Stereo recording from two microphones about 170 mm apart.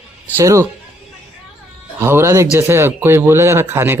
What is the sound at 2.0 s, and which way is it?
Speech, 15° right (ahead or behind).